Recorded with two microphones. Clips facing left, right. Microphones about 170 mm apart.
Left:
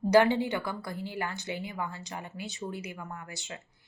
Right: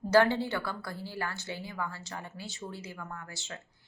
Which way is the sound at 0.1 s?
15° left (ahead or behind).